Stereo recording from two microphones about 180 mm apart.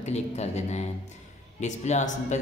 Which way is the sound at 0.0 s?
40° left (ahead or behind).